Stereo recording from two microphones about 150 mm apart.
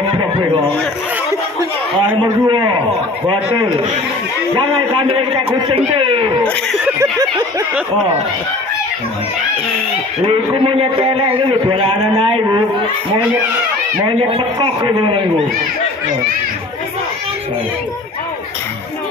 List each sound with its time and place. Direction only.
2.2 s a man's voice: 30° right (ahead or behind)
4.6 s a man's voice: 35° right (ahead or behind)
6.4 s speech: 10° left (ahead or behind)
7.0 s a sound: 20° right (ahead or behind)
10.2 s a man's voice: 35° right (ahead or behind)
14.2 s a man's voice: 40° right (ahead or behind)